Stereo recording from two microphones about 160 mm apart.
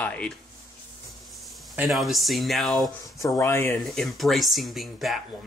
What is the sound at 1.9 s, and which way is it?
Speech, centre (ahead or behind).